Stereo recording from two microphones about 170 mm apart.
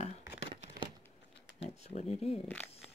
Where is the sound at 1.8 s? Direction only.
40° left (ahead or behind).